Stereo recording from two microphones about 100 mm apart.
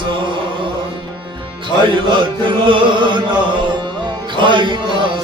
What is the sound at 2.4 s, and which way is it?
Music, 55° right (ahead or behind).